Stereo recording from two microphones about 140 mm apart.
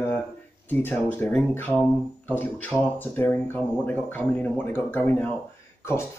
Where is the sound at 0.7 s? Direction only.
15° left (ahead or behind).